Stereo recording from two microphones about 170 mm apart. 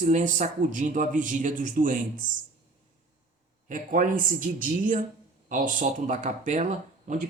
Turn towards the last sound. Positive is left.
turn(degrees=-45)  # may be behind; listen again after turning